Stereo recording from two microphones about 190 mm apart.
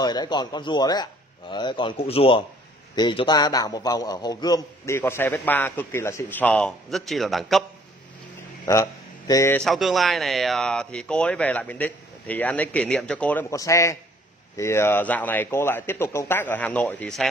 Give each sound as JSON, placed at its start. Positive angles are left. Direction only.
{"t": 0.0, "sound": "a man's voice", "side_deg": 20}
{"t": 9.3, "sound": "a man's voice", "side_deg": 15}
{"t": 9.7, "sound": "a man's voice", "side_deg": 0}